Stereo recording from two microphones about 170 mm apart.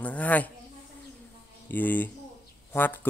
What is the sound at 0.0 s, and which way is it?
Speech, 10° left (ahead or behind).